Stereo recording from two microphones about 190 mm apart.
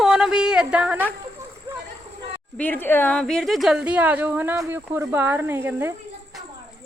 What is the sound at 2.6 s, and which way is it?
A woman's voice, 10° left (ahead or behind).